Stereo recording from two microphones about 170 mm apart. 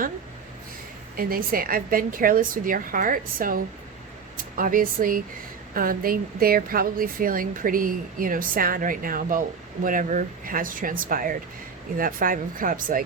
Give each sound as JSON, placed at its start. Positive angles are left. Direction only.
{"t": 1.1, "sound": "speech", "side_deg": -60}